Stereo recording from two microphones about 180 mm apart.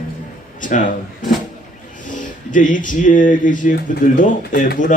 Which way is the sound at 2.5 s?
45° left (ahead or behind).